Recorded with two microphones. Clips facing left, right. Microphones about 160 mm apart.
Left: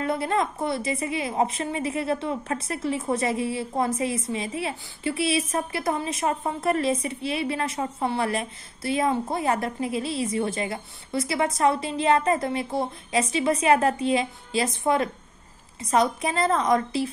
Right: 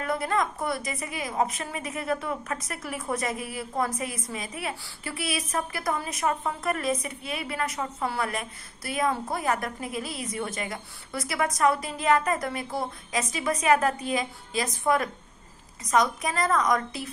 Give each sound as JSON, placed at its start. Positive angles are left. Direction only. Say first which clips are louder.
{"t": 0.0, "sound": "a woman's voice", "louder": "left 2 dB", "side_deg": 25}